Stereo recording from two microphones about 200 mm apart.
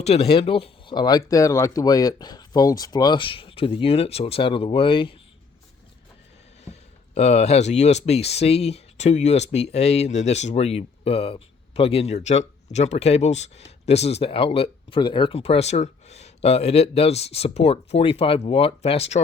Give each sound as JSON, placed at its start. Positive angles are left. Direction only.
{"t": 0.0, "sound": "speech", "side_deg": 30}
{"t": 6.7, "sound": "speech", "side_deg": 35}